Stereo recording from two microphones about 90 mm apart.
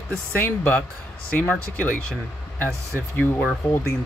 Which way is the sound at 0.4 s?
20° left (ahead or behind).